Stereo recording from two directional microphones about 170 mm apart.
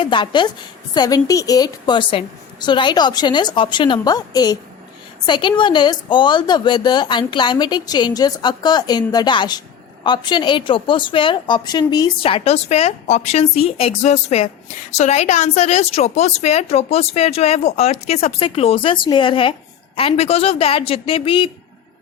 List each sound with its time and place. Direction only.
0.0 s a woman's voice: 30° left (ahead or behind)